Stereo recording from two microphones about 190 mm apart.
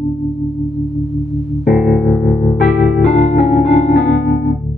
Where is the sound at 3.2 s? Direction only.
35° left (ahead or behind).